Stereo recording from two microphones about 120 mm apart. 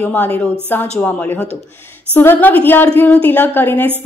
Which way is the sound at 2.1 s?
15° left (ahead or behind).